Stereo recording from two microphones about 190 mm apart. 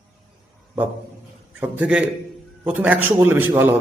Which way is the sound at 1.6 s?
5° right (ahead or behind).